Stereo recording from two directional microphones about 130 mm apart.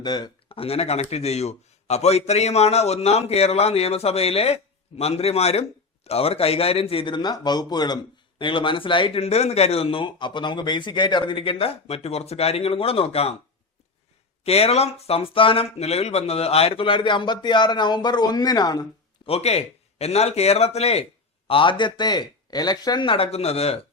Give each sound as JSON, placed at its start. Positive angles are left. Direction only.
{"t": 0.0, "sound": "a sound", "side_deg": 30}
{"t": 0.5, "sound": "a man's voice", "side_deg": 50}
{"t": 14.4, "sound": "a man's voice", "side_deg": 50}
{"t": 19.3, "sound": "a man's voice", "side_deg": 55}
{"t": 21.4, "sound": "speech", "side_deg": 40}